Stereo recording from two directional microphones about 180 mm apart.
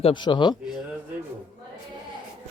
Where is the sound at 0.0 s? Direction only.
25° left (ahead or behind).